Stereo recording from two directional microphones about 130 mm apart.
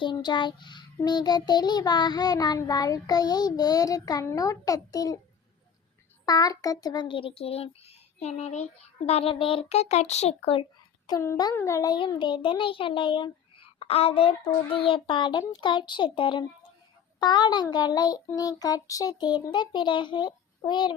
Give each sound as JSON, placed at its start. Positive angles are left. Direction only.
{"t": 0.0, "sound": "child singing", "side_deg": 35}
{"t": 6.2, "sound": "speech", "side_deg": 30}
{"t": 9.0, "sound": "speech", "side_deg": 50}
{"t": 11.1, "sound": "a child's voice", "side_deg": 30}
{"t": 11.5, "sound": "child singing", "side_deg": 25}